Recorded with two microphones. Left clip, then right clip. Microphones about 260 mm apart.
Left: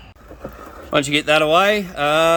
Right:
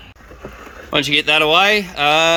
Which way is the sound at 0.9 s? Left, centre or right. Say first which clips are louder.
Right 2 dB; centre.